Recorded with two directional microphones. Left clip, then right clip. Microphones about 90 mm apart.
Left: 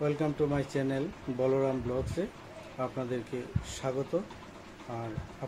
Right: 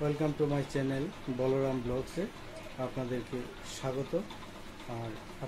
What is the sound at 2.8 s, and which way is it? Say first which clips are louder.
Speech: left 2 dB; 5° left (ahead or behind).